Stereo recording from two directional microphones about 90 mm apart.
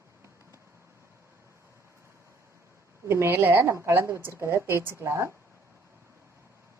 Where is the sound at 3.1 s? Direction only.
25° right (ahead or behind).